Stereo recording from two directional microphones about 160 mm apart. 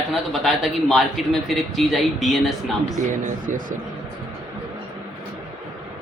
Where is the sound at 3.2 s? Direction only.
55° right (ahead or behind).